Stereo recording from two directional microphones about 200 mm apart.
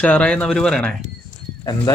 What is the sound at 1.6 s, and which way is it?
Speech, 20° left (ahead or behind).